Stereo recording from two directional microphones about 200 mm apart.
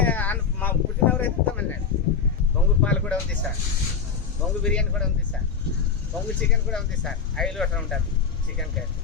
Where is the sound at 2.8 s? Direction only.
5° left (ahead or behind).